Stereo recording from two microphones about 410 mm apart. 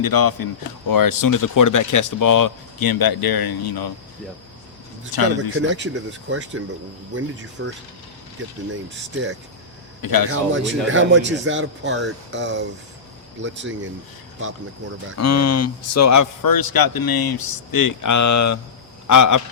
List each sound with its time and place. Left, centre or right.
0.0 s a man's voice: left
5.1 s speech: left
5.5 s speech: right
7.6 s speech: right
10.0 s a man's voice: left
10.5 s speech: right
15.2 s a man's voice: left